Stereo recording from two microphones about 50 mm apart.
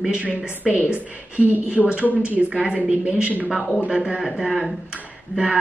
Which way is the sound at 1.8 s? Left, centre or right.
Centre.